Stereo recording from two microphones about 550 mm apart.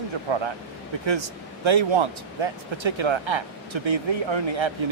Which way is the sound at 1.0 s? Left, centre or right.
Right.